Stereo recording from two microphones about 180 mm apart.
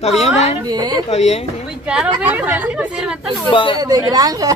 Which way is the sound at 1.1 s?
35° left (ahead or behind).